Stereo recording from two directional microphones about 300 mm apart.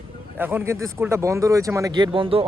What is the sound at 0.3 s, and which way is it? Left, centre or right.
Speech, centre.